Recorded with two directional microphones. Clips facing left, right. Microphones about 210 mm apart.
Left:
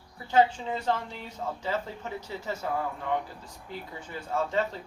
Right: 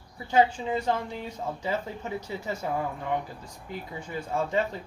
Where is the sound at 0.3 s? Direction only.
10° right (ahead or behind).